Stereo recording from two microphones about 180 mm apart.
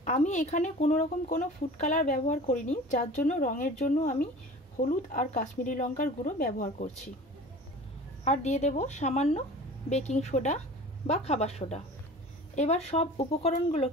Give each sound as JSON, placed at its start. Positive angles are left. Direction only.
{"t": 0.0, "sound": "speech", "side_deg": 40}
{"t": 8.2, "sound": "speech", "side_deg": 40}